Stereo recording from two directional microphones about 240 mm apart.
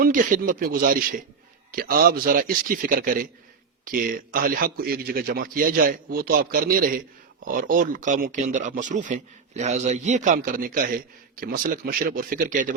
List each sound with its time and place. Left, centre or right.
0.0 s speech: right